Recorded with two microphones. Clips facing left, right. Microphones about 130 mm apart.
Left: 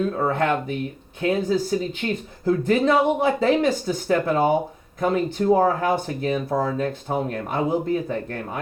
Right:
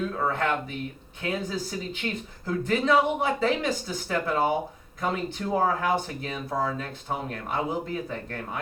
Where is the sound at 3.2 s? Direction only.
45° left (ahead or behind).